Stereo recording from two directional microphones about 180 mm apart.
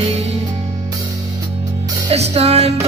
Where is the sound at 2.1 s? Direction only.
35° right (ahead or behind).